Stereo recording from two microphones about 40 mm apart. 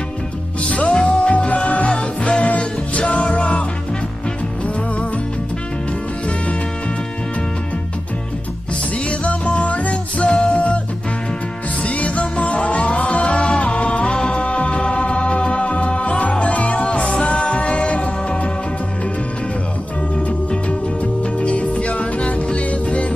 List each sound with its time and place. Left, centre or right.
0.7 s music: left
9.2 s music: left
11.8 s music: left
14.1 s music: centre
14.4 s music: left
21.4 s music: left